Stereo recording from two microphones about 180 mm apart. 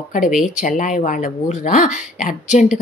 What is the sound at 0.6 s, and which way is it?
Speech, 45° left (ahead or behind).